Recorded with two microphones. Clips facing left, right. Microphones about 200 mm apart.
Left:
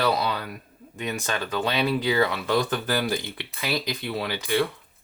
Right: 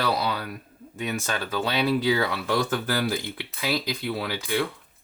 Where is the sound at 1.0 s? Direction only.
15° left (ahead or behind).